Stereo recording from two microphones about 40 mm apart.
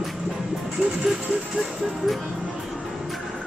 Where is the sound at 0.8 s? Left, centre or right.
Right.